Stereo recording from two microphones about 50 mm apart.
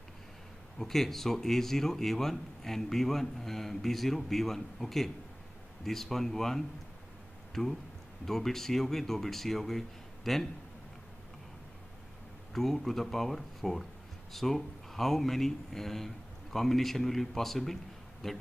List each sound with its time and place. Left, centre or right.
0.7 s a man's voice: centre
12.5 s a man's voice: centre